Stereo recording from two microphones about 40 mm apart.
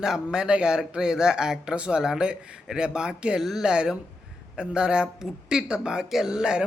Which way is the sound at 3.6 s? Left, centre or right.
Right.